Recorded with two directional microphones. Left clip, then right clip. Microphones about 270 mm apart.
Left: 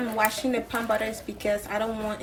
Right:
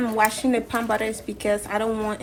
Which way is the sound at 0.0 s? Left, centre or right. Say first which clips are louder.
Right 4 dB; right.